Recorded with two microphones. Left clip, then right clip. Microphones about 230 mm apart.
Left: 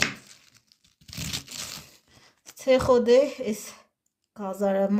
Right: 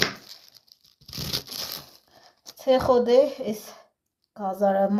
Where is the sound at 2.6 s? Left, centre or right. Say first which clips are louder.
Even; left.